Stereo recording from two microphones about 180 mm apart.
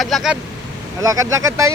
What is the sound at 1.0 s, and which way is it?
Speech, 20° right (ahead or behind).